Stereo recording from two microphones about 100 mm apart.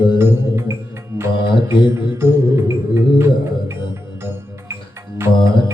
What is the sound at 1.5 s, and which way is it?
Music, 50° left (ahead or behind).